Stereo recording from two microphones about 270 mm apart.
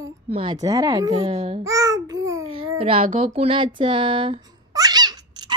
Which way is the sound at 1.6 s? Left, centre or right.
Centre.